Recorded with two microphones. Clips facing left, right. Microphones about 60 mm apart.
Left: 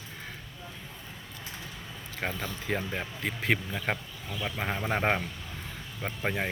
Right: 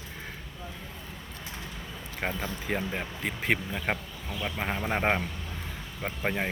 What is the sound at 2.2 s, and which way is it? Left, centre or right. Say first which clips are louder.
Speech: right 1 dB; centre.